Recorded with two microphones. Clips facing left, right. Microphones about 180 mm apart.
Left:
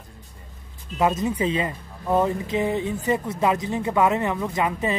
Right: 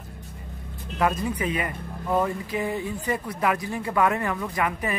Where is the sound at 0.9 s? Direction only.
20° left (ahead or behind).